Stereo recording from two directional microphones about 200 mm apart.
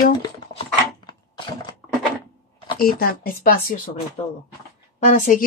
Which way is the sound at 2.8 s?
45° left (ahead or behind).